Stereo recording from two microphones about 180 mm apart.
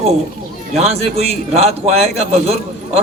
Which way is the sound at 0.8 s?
35° right (ahead or behind).